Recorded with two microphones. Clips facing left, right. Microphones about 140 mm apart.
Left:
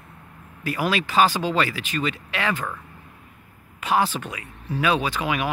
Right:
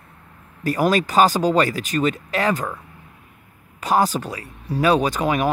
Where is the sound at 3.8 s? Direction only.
40° right (ahead or behind).